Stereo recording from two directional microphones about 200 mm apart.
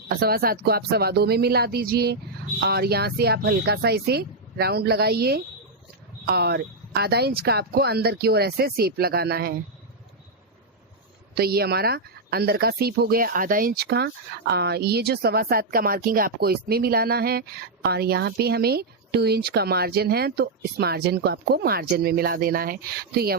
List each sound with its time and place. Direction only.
0.1 s speech: 50° right (ahead or behind)
11.3 s speech: 50° right (ahead or behind)